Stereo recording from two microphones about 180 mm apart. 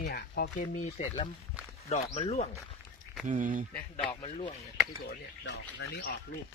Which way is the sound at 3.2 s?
45° right (ahead or behind).